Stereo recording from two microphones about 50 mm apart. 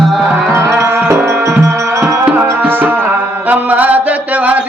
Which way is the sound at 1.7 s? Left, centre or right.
Right.